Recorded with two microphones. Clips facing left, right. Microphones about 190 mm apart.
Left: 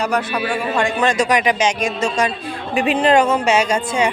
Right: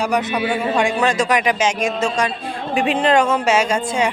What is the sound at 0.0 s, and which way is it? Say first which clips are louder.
Speech: right 1 dB; 20° right (ahead or behind).